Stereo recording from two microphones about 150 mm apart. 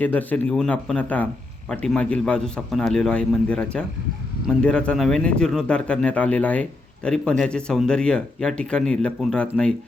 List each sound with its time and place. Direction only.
0.0 s a man's voice: 10° left (ahead or behind)